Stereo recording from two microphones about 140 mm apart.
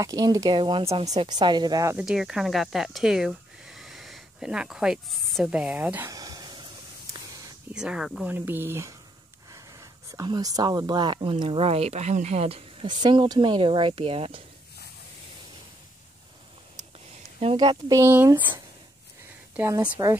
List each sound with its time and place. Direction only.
0.0 s speech: 25° right (ahead or behind)
0.6 s speech: 35° right (ahead or behind)
2.0 s speech: 5° right (ahead or behind)
6.0 s a sound: 25° right (ahead or behind)
7.7 s speech: 5° right (ahead or behind)
8.3 s speech: 15° right (ahead or behind)
10.1 s speech: 30° right (ahead or behind)
17.6 s speech: 30° right (ahead or behind)
18.0 s speech: 15° right (ahead or behind)
19.5 s speech: 20° right (ahead or behind)